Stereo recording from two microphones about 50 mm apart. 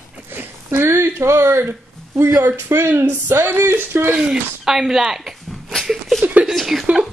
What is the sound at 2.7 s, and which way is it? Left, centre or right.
Speech, right.